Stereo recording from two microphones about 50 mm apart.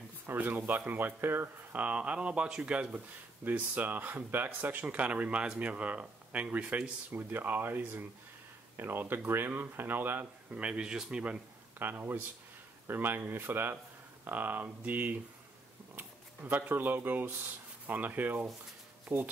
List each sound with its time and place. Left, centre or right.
0.4 s speech: right
1.8 s speech: right
7.2 s speech: right
10.5 s speech: right
11.8 s speech: right